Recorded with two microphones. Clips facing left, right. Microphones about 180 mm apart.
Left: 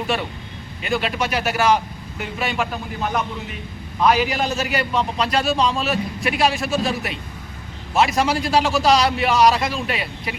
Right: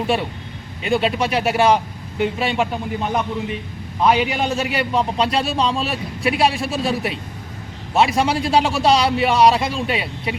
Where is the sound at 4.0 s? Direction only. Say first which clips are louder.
Right 1 dB; 25° right (ahead or behind).